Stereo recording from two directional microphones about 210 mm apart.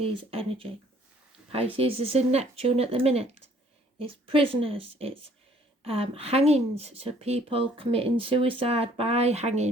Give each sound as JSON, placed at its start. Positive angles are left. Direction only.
{"t": 0.0, "sound": "speech", "side_deg": -25}